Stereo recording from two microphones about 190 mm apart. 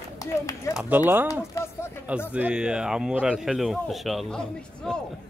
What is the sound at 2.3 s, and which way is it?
A man's voice, 5° right (ahead or behind).